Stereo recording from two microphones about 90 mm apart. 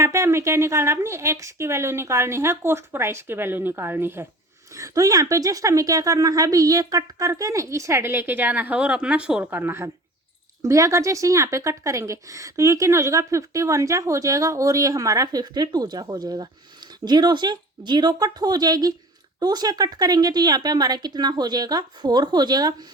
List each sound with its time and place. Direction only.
0.0 s a woman's voice: 30° right (ahead or behind)
4.7 s speech: 35° right (ahead or behind)
10.6 s speech: 35° right (ahead or behind)